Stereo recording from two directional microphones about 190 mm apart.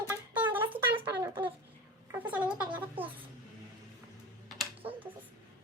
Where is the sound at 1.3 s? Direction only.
25° right (ahead or behind).